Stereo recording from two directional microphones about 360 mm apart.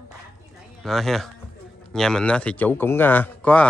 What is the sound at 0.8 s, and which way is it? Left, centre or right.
A man's voice, centre.